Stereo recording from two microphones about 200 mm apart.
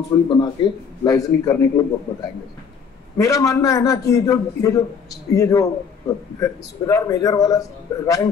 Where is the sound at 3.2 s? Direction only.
15° left (ahead or behind).